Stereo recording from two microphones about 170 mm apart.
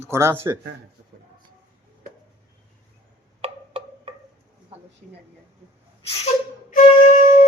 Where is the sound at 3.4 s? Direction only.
35° right (ahead or behind).